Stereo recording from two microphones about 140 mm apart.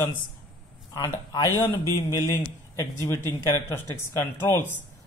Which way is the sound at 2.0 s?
20° left (ahead or behind).